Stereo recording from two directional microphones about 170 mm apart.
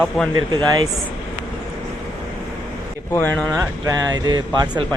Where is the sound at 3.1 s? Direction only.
10° left (ahead or behind).